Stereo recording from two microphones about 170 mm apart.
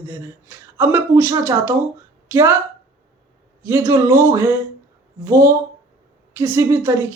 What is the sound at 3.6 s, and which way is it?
A man's voice, 15° right (ahead or behind).